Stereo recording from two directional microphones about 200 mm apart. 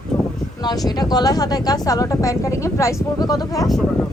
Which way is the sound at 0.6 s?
20° left (ahead or behind).